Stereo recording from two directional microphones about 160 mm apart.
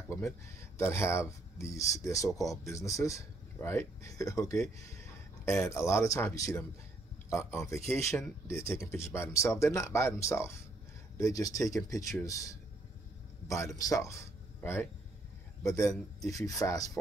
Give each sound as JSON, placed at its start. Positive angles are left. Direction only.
{"t": 0.7, "sound": "speech", "side_deg": 15}
{"t": 13.7, "sound": "speech", "side_deg": 20}